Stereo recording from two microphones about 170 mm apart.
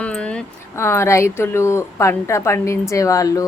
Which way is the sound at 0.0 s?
5° left (ahead or behind).